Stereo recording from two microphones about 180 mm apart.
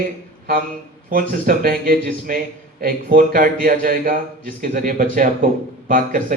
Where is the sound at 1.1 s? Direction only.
50° right (ahead or behind).